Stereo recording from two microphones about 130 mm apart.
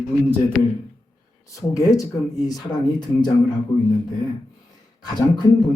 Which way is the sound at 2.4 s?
30° left (ahead or behind).